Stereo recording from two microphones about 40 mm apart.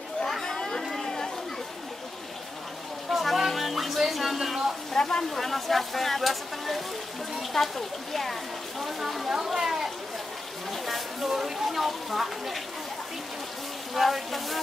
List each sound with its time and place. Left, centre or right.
0.3 s chatter: centre
3.1 s music: centre
4.9 s a sound: centre
5.3 s speech: centre
10.7 s a sound: centre
11.6 s speech: centre
13.9 s speech: centre